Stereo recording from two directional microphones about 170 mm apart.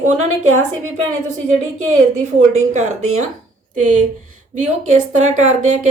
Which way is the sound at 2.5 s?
45° right (ahead or behind).